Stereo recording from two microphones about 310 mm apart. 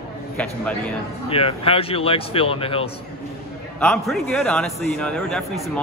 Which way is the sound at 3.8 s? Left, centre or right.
Centre.